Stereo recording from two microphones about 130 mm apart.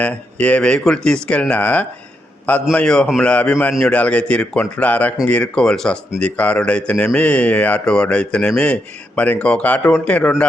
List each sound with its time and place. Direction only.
0.0 s speech: 10° left (ahead or behind)